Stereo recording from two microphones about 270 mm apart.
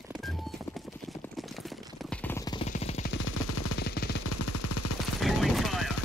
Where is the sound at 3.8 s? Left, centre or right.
Left.